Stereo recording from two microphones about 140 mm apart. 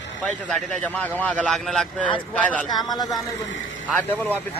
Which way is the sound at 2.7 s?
30° left (ahead or behind).